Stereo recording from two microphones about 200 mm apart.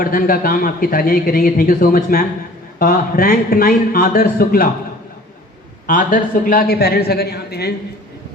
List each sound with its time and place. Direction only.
0.0 s a man's voice: 45° left (ahead or behind)
5.9 s a man's voice: 40° left (ahead or behind)